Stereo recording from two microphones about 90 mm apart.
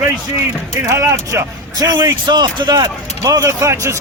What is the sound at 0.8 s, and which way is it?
Speech, 35° right (ahead or behind).